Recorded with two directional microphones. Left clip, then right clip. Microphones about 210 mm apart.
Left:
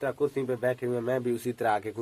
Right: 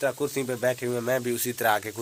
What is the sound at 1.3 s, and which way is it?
Speech, centre (ahead or behind).